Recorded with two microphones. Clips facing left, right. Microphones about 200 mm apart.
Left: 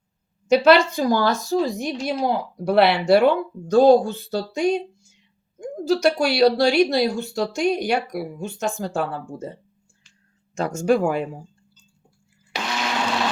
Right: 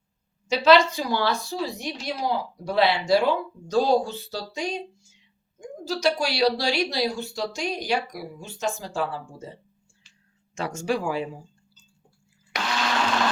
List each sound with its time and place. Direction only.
0.4 s a woman's voice: 55° left (ahead or behind)
10.5 s speech: 45° left (ahead or behind)